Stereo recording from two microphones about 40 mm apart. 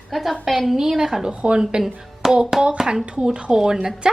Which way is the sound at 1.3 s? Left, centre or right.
Right.